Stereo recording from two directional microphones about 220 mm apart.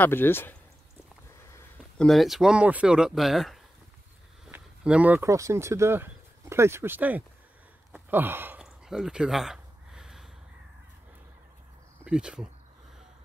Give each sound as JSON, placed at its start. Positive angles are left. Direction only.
{"t": 0.0, "sound": "speech", "side_deg": 10}
{"t": 7.9, "sound": "a sound", "side_deg": -10}
{"t": 12.0, "sound": "speech", "side_deg": -5}